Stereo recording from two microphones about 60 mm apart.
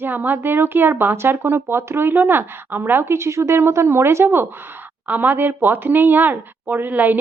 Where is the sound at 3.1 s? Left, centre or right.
Right.